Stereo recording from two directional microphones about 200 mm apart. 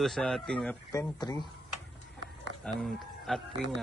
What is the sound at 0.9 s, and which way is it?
Speech, 20° left (ahead or behind).